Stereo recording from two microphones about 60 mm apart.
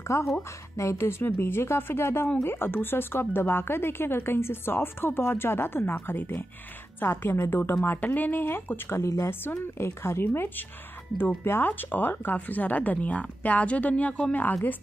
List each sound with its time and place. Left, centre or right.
0.1 s speech: left
8.0 s speech: left